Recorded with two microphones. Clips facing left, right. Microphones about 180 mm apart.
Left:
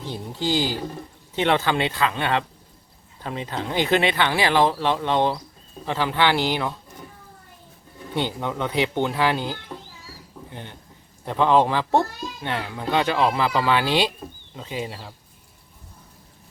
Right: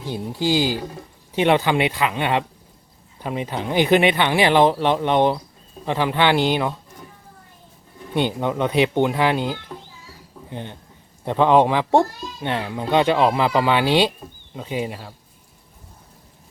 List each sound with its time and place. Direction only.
0.0 s a child's voice: 15° right (ahead or behind)
8.1 s a child's voice: 20° right (ahead or behind)